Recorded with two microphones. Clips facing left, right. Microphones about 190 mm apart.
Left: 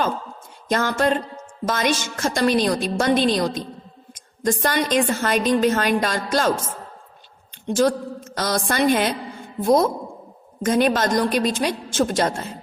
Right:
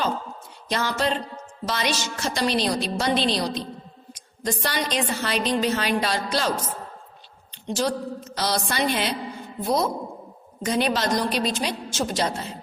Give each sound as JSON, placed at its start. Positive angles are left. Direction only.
{"t": 0.7, "sound": "a woman's voice", "side_deg": 50}
{"t": 7.7, "sound": "a woman's voice", "side_deg": 50}